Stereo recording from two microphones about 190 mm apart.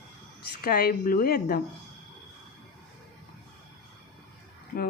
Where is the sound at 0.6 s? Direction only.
50° left (ahead or behind).